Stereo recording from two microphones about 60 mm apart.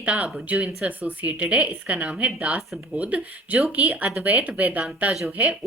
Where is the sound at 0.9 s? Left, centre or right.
Right.